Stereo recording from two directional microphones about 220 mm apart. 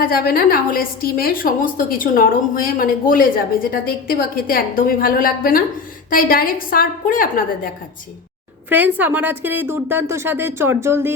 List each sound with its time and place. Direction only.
0.0 s a woman's voice: 40° left (ahead or behind)
8.7 s a woman's voice: 10° right (ahead or behind)